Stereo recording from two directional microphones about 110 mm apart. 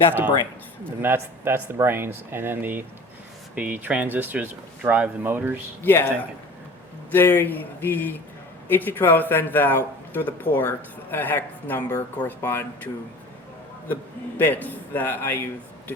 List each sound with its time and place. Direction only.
1.0 s speech: 20° right (ahead or behind)
5.8 s speech: 20° left (ahead or behind)
7.1 s speech: 20° left (ahead or behind)